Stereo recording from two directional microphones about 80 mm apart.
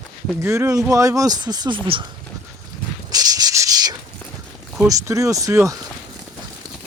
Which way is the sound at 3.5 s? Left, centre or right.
Right.